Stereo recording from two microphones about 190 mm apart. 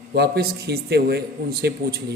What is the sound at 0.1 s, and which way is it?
A man's voice, 55° right (ahead or behind).